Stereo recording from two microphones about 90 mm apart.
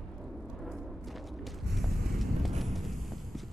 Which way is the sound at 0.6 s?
Centre (ahead or behind).